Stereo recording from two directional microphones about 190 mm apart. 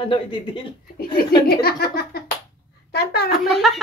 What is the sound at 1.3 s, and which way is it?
Speech, 55° left (ahead or behind).